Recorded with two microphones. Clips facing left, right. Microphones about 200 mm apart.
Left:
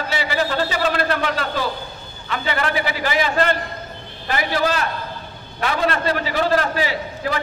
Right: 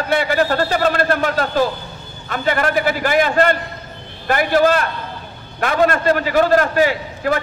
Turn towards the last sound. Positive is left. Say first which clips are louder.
# right 5 dB
turn(degrees=-50)  # may be behind; listen again after turning